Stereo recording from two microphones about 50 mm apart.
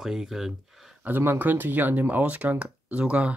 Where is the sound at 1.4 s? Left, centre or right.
Right.